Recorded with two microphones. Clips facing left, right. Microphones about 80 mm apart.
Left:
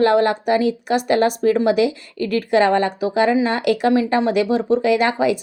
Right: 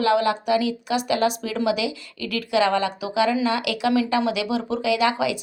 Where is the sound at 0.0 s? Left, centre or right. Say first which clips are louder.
Left 5 dB; left.